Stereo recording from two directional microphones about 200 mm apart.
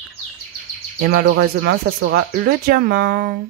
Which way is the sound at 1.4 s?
45° right (ahead or behind).